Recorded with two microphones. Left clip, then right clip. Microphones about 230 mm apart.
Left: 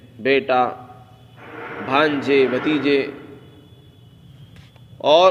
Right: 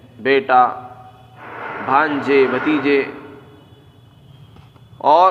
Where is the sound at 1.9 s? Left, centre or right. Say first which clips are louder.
Right 2 dB; left.